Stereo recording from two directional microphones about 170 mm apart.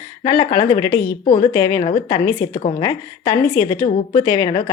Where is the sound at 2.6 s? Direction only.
40° left (ahead or behind).